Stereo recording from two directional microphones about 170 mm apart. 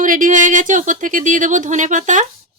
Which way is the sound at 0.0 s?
50° right (ahead or behind).